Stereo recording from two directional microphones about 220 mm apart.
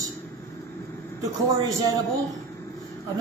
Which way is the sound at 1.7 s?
15° right (ahead or behind).